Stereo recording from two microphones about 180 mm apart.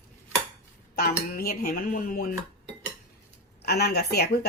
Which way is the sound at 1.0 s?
55° left (ahead or behind).